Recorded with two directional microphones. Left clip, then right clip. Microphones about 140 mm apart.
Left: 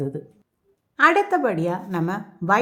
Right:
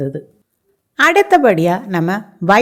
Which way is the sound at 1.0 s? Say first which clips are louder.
Right 7 dB; 35° right (ahead or behind).